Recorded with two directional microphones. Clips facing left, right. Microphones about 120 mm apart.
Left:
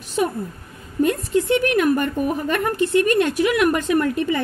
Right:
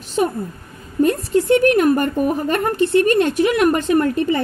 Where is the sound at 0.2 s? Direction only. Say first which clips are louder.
Right 2 dB; 35° right (ahead or behind).